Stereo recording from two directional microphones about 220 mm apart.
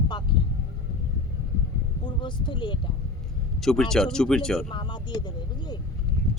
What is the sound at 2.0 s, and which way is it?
Speech, 20° left (ahead or behind).